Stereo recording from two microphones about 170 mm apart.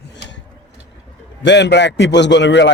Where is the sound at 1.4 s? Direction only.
90° left.